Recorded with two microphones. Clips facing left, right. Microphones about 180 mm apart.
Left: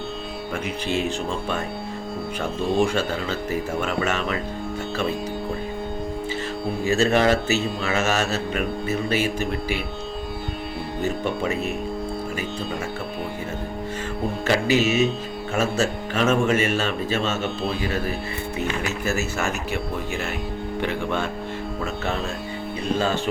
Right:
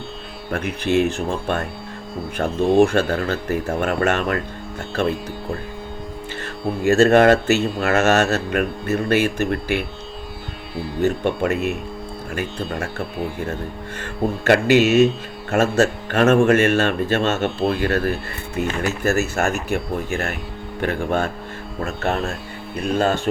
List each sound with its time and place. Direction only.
0.5 s speech: 60° right (ahead or behind)
2.4 s speech: 55° right (ahead or behind)
6.8 s speech: 60° right (ahead or behind)
12.4 s speech: 60° right (ahead or behind)
14.4 s speech: 65° right (ahead or behind)